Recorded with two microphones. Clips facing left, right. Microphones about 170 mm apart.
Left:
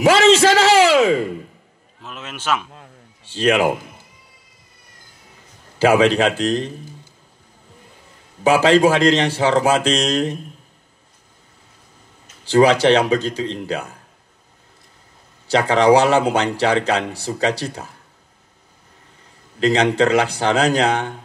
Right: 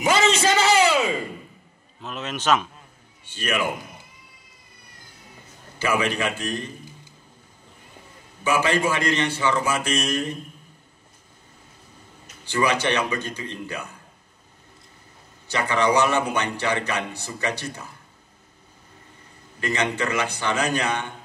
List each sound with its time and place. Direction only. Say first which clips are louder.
0.0 s a sound: left 8 dB; 90° left
2.0 s a man's voice: right 1 dB; 10° left (ahead or behind)
3.3 s a man's voice: left 9 dB; 90° left
5.8 s a man's voice: left 10 dB; 90° left
8.5 s a man's voice: left 9 dB; 90° left
12.4 s a man's voice: left 10 dB; 85° left
15.5 s a man's voice: left 8 dB; 90° left; by 17.9 s 75° left (ahead or behind)
19.6 s a man's voice: left 9 dB; 90° left